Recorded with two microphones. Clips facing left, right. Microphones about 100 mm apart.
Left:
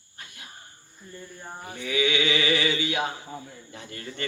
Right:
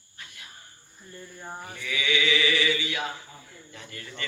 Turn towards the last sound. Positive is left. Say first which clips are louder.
# left 4 dB
turn(degrees=40)  # may be behind; listen again after turning